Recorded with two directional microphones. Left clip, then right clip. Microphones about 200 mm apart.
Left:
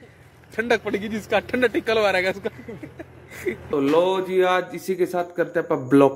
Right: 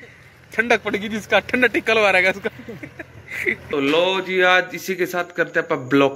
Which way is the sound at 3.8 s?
20° left (ahead or behind).